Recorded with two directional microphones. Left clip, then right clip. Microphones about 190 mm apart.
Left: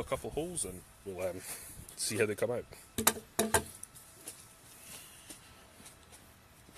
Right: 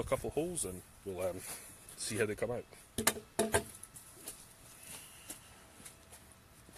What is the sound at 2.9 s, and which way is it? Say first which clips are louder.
Music: left 2 dB; 40° left (ahead or behind).